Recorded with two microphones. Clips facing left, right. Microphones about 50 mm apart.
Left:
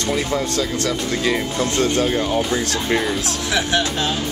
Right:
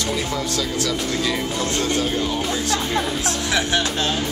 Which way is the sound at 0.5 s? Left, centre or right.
Left.